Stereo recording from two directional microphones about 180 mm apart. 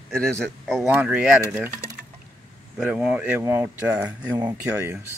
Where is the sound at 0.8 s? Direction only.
10° right (ahead or behind).